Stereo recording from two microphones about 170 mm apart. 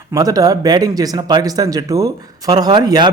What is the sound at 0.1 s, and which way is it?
Speech, 20° right (ahead or behind).